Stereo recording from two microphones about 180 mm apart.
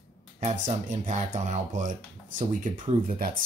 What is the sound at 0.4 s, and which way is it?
Speech, 40° right (ahead or behind).